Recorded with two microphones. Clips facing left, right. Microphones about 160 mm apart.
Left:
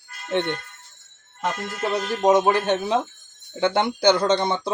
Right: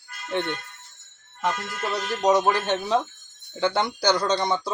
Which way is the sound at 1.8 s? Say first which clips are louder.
Left 5 dB; 20° left (ahead or behind).